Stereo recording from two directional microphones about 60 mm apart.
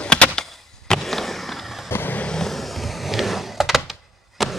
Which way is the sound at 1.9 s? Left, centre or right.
Left.